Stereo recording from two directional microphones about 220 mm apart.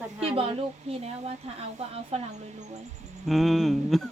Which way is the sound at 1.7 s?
30° right (ahead or behind).